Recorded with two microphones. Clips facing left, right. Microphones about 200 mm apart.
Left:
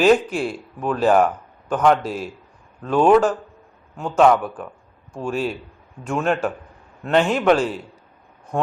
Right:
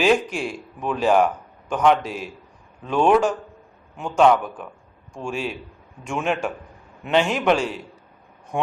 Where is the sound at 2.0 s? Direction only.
35° left (ahead or behind).